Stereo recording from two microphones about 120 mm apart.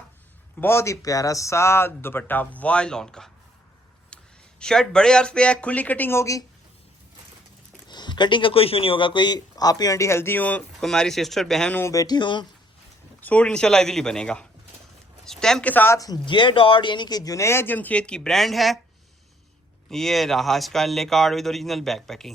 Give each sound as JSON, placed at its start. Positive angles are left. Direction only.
{"t": 0.6, "sound": "speech", "side_deg": 20}
{"t": 4.1, "sound": "a sound", "side_deg": 10}
{"t": 4.6, "sound": "speech", "side_deg": 5}
{"t": 7.9, "sound": "speech", "side_deg": 40}
{"t": 11.7, "sound": "speech", "side_deg": 25}
{"t": 13.2, "sound": "speech", "side_deg": 10}
{"t": 15.7, "sound": "speech", "side_deg": 15}
{"t": 16.0, "sound": "speech", "side_deg": 35}
{"t": 19.9, "sound": "speech", "side_deg": 5}